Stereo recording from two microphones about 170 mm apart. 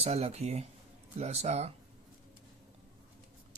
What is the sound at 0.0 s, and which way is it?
Speech, 40° right (ahead or behind).